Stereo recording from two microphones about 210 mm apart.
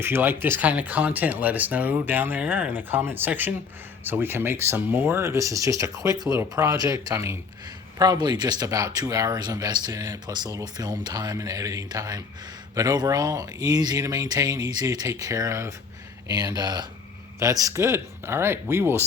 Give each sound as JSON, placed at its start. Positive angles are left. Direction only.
{"t": 0.0, "sound": "speech", "side_deg": -10}